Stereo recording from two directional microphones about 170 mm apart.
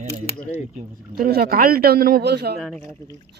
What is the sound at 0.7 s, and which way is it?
Speech, 55° right (ahead or behind).